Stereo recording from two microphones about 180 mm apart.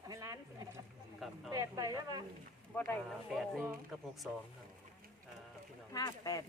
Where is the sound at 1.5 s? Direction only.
20° right (ahead or behind).